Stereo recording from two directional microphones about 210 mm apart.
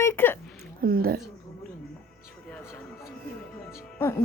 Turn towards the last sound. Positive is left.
turn(degrees=5)  # may be behind; listen again after turning